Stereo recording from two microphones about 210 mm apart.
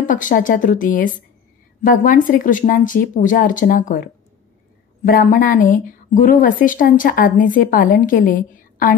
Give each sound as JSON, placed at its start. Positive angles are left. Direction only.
{"t": 0.0, "sound": "a woman's voice", "side_deg": 40}